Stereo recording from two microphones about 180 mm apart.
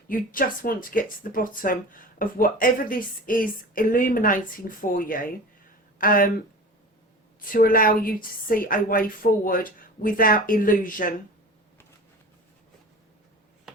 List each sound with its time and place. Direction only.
0.1 s speech: 50° left (ahead or behind)
7.5 s speech: 50° left (ahead or behind)